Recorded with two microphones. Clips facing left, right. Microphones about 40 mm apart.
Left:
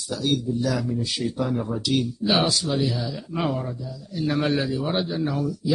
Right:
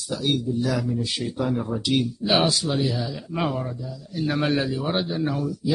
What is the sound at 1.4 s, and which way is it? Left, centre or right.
Speech, centre.